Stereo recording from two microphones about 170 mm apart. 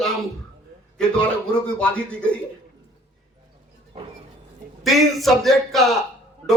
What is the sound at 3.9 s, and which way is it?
Speech, 35° right (ahead or behind).